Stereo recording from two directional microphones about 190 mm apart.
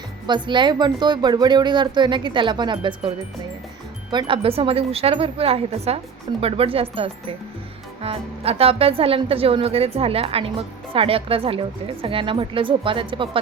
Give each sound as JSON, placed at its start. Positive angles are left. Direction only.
{"t": 0.3, "sound": "speech", "side_deg": -25}
{"t": 4.1, "sound": "speech", "side_deg": -25}